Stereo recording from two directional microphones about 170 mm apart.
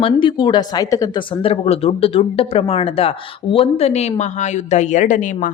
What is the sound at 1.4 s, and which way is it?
Speech, 35° left (ahead or behind).